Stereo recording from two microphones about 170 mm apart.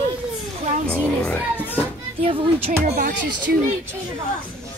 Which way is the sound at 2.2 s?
30° right (ahead or behind).